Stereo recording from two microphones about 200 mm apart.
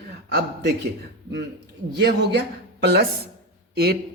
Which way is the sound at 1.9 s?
60° right (ahead or behind).